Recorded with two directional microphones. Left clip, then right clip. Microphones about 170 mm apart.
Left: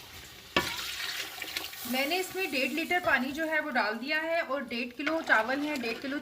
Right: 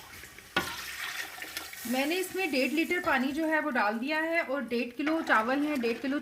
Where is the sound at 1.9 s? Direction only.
50° right (ahead or behind).